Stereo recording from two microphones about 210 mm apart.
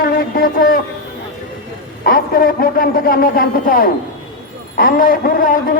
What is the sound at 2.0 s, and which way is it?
A man's voice, 45° left (ahead or behind).